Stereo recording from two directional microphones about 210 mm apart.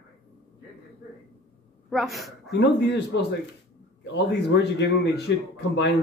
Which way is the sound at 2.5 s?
55° left (ahead or behind).